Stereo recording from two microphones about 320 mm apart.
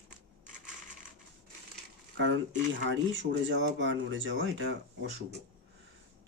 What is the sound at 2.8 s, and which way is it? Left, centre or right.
Speech, right.